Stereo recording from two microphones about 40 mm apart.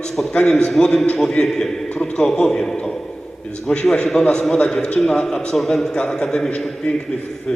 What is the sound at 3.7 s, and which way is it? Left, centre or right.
A man's voice, left.